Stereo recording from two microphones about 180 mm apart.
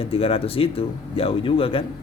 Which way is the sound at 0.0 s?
30° left (ahead or behind).